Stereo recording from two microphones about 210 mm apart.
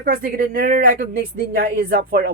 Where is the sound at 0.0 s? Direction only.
45° right (ahead or behind).